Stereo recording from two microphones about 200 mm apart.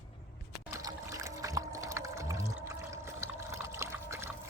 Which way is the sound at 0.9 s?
15° right (ahead or behind).